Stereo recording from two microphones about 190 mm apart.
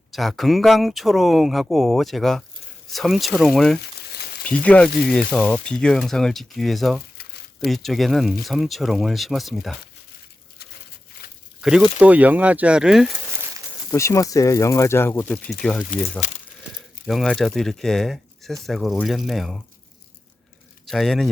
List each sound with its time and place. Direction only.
0.1 s speech: centre (ahead or behind)
3.8 s frying: 55° left (ahead or behind)
4.4 s speech: 5° left (ahead or behind)
11.6 s speech: 5° right (ahead or behind)
13.9 s speech: 15° left (ahead or behind)
15.9 s speech: 45° left (ahead or behind)
17.1 s speech: centre (ahead or behind)
20.8 s a man's voice: centre (ahead or behind)